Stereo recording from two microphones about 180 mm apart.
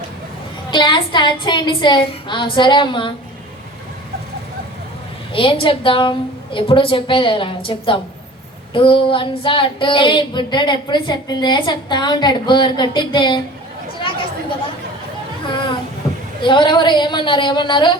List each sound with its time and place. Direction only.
0.7 s child singing: 25° left (ahead or behind)
5.3 s child singing: 30° left (ahead or behind)
15.4 s a sound: 25° left (ahead or behind)
16.4 s child singing: 25° left (ahead or behind)